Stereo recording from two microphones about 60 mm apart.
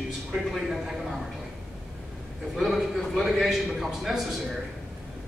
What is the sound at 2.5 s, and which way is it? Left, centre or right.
A man's voice, centre.